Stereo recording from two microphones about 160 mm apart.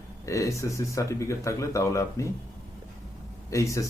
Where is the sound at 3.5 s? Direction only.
20° left (ahead or behind).